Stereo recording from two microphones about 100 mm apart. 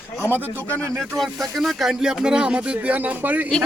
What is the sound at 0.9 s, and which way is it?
Speech, centre (ahead or behind).